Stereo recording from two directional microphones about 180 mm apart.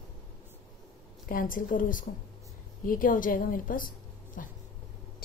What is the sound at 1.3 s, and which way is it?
A woman's voice, 50° left (ahead or behind).